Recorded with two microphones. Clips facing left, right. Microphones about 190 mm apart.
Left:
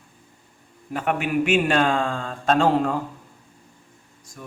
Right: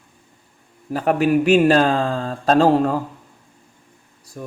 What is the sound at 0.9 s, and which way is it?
Speech, 35° right (ahead or behind).